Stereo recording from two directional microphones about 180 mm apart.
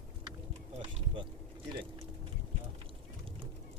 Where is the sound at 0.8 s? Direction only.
25° right (ahead or behind).